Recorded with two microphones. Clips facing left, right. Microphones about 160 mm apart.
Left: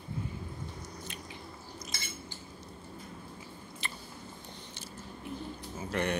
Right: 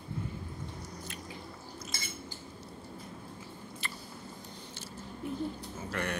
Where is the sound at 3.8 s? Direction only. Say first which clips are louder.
Left 1 dB; 20° left (ahead or behind).